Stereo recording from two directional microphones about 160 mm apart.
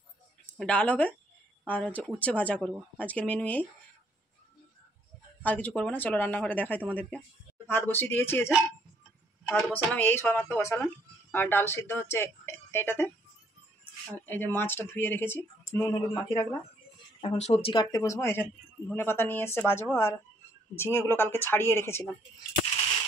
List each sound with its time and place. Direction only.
0.5 s speech: 10° left (ahead or behind)
5.4 s speech: 10° left (ahead or behind)
9.5 s speech: 10° left (ahead or behind)
14.1 s speech: 10° left (ahead or behind)
17.2 s speech: 40° left (ahead or behind)
17.9 s speech: 15° left (ahead or behind)